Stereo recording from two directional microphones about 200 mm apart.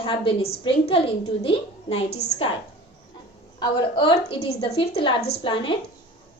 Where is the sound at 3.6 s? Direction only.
25° left (ahead or behind).